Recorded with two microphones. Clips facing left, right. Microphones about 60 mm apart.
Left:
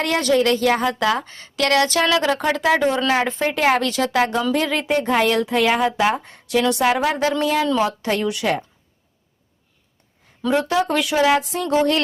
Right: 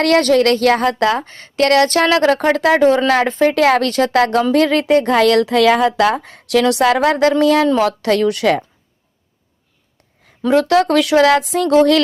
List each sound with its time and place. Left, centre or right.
0.0 s speech: right
7.8 s speech: right
10.5 s speech: right